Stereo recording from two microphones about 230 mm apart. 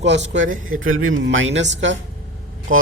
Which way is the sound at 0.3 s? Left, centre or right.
Right.